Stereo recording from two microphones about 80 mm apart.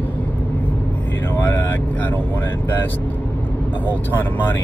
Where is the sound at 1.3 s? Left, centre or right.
Left.